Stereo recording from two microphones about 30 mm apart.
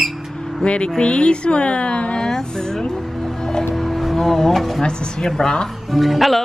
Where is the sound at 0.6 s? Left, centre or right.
Left.